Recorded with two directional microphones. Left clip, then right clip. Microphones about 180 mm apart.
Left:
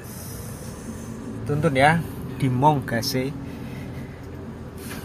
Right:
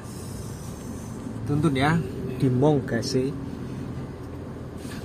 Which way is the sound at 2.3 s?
20° left (ahead or behind).